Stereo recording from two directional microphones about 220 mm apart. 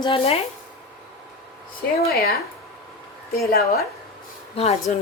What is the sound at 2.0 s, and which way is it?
Speech, 45° left (ahead or behind).